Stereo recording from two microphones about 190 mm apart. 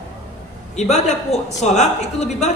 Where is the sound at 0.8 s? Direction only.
35° left (ahead or behind).